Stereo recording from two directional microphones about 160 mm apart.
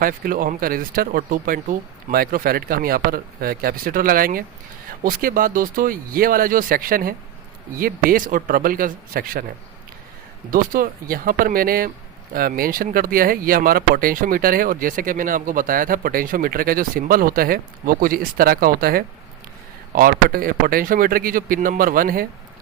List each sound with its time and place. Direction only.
0.0 s speech: 60° right (ahead or behind)
10.5 s speech: 60° right (ahead or behind)